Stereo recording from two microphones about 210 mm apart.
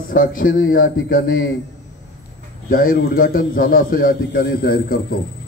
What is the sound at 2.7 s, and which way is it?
A man's voice, 45° left (ahead or behind).